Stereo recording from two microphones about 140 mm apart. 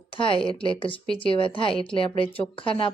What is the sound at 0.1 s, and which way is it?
A woman's voice, 40° left (ahead or behind).